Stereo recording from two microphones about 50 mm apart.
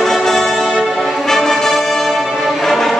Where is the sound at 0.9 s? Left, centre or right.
Centre.